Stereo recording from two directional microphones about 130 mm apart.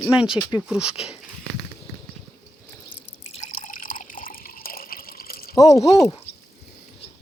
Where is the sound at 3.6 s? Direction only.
90° left.